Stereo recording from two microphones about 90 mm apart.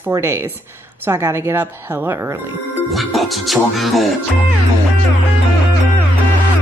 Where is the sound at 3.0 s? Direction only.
Centre (ahead or behind).